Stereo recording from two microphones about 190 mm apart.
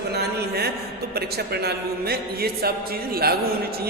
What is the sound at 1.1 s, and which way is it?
A man's voice, 55° right (ahead or behind).